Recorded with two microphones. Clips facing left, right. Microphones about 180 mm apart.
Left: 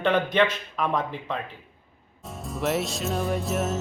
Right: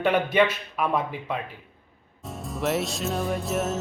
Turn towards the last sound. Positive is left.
turn(degrees=0)  # may be behind; listen again after turning